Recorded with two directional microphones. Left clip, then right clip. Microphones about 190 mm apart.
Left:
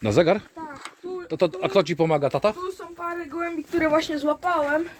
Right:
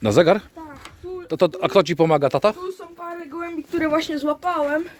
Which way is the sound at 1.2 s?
50° right (ahead or behind).